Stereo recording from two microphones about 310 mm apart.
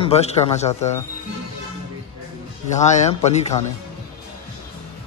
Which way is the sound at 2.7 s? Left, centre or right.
Left.